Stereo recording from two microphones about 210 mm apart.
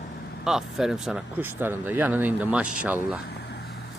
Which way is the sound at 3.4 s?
50° left (ahead or behind).